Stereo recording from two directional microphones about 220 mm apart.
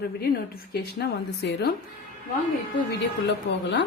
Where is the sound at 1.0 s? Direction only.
45° left (ahead or behind).